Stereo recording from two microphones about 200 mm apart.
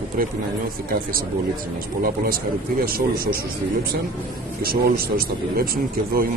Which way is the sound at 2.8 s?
45° right (ahead or behind).